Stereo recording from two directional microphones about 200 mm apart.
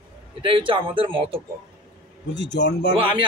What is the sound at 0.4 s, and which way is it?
A man's voice, 25° right (ahead or behind).